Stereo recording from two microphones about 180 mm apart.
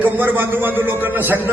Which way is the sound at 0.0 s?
10° right (ahead or behind).